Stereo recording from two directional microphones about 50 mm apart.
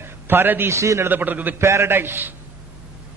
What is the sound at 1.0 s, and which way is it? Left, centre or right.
Speech, right.